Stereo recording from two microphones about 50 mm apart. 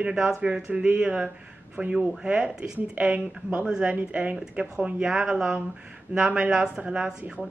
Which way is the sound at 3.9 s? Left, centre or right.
Right.